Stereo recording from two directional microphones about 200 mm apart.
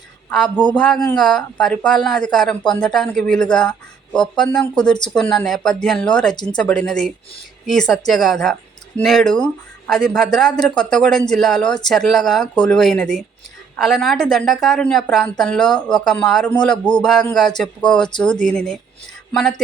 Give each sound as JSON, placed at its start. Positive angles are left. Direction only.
{"t": 0.3, "sound": "a woman's voice", "side_deg": 5}
{"t": 6.3, "sound": "speech", "side_deg": 20}
{"t": 6.6, "sound": "a woman's voice", "side_deg": 5}